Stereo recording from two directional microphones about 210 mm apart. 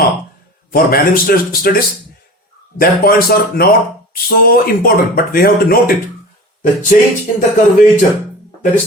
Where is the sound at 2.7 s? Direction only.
45° left (ahead or behind).